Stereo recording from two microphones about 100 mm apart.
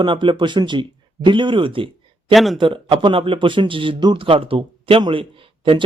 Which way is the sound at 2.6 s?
60° right (ahead or behind).